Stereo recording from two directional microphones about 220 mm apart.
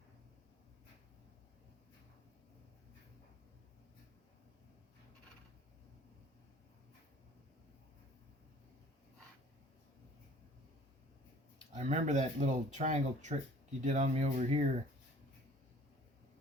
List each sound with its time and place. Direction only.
11.7 s speech: 30° right (ahead or behind)